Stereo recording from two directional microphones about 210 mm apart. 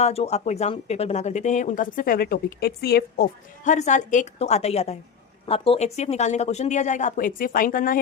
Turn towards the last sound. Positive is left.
turn(degrees=40)  # may be behind; listen again after turning